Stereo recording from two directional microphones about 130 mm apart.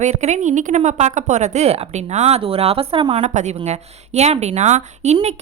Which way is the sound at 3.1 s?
70° right (ahead or behind).